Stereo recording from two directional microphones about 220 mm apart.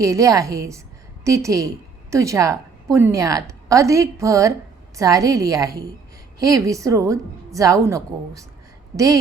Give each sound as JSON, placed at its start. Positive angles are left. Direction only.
{"t": 0.0, "sound": "a woman's voice", "side_deg": -15}